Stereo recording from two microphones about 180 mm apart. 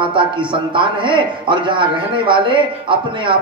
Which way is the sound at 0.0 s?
25° right (ahead or behind).